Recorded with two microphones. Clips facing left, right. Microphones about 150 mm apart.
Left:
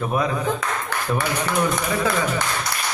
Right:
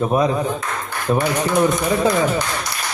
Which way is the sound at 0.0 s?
25° right (ahead or behind).